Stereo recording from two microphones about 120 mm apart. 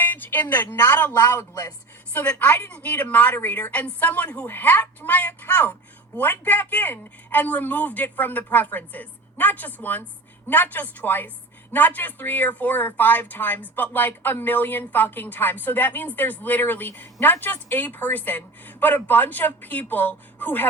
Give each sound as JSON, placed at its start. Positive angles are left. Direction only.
{"t": 0.0, "sound": "speech", "side_deg": 15}
{"t": 1.3, "sound": "speech", "side_deg": 25}
{"t": 2.1, "sound": "speech", "side_deg": 10}